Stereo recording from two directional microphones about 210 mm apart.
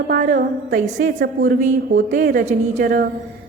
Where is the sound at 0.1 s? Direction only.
40° right (ahead or behind).